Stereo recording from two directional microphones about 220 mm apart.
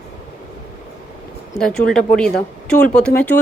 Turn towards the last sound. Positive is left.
turn(degrees=10)  # may be behind; listen again after turning